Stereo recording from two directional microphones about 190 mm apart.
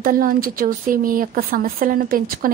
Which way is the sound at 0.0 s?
50° right (ahead or behind).